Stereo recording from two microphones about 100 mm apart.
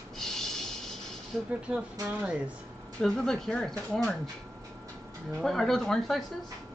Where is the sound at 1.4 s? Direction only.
10° right (ahead or behind).